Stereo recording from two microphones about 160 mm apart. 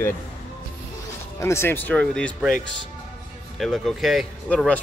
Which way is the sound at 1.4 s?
15° left (ahead or behind).